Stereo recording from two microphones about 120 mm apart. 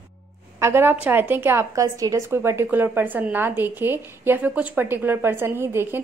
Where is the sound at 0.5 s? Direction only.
20° right (ahead or behind).